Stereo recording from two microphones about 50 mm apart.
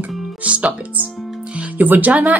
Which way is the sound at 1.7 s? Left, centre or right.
Right.